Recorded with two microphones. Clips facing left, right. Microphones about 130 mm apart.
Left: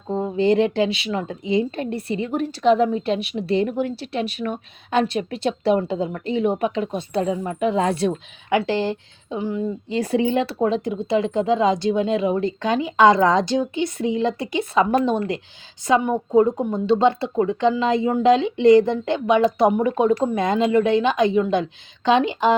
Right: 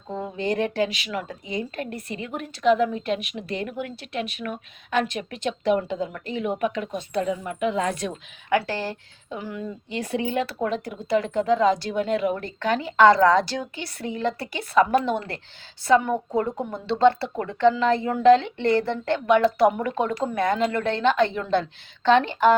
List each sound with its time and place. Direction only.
0.1 s speech: 30° left (ahead or behind); by 22.5 s 15° left (ahead or behind)